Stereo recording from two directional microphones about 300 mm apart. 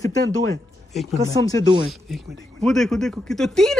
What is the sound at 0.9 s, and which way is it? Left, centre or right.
Speech, centre.